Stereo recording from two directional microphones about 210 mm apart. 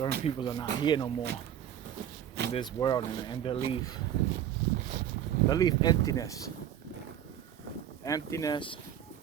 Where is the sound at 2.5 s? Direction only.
20° left (ahead or behind).